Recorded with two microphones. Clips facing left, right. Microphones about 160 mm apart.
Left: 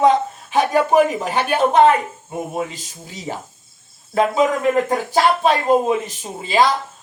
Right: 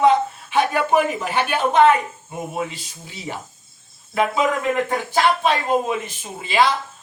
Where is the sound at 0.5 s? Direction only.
40° left (ahead or behind).